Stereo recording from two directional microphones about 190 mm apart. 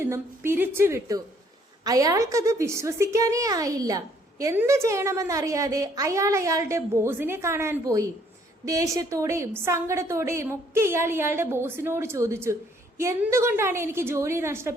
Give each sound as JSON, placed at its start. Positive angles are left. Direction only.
{"t": 0.0, "sound": "a woman's voice", "side_deg": -10}